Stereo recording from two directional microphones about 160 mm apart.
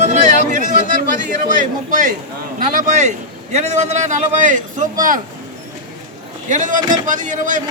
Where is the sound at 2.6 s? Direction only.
55° right (ahead or behind).